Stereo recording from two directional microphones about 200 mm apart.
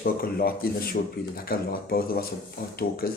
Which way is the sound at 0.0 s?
50° left (ahead or behind).